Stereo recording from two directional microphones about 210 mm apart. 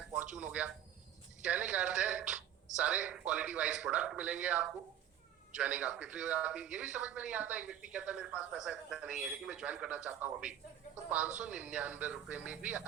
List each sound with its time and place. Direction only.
0.1 s a man's voice: 5° right (ahead or behind)